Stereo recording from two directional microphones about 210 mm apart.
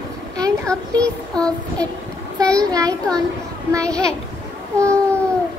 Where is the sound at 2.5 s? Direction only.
15° right (ahead or behind).